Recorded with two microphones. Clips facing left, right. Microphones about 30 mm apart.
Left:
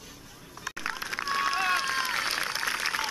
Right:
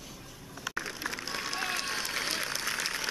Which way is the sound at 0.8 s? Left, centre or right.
Left.